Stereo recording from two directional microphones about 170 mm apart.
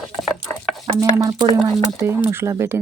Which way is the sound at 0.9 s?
20° right (ahead or behind).